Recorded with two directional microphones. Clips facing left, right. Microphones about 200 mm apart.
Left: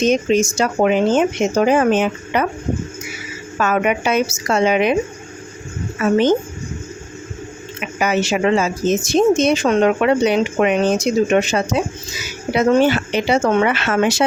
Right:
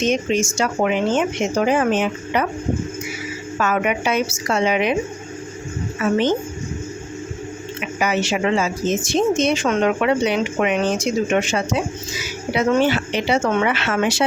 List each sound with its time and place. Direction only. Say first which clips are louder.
0.0 s speech: left 4 dB; 40° left (ahead or behind)
3.6 s speech: left 3 dB; 45° left (ahead or behind)
8.0 s speech: left 3 dB; 45° left (ahead or behind)